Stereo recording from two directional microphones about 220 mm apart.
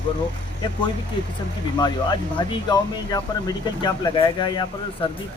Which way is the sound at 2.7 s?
20° left (ahead or behind).